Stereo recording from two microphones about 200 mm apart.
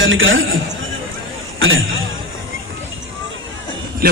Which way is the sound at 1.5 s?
80° right.